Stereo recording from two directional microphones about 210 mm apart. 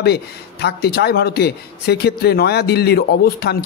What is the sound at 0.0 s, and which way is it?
Speech, 50° left (ahead or behind).